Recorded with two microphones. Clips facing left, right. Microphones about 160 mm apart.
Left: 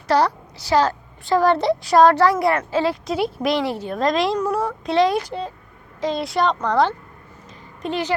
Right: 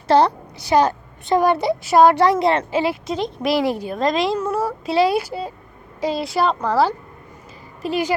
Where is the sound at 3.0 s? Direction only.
5° left (ahead or behind).